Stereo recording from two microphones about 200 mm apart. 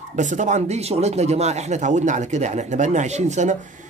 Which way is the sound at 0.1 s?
35° right (ahead or behind).